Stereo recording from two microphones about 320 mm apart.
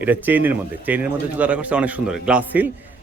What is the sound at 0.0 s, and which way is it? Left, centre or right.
Speech, centre.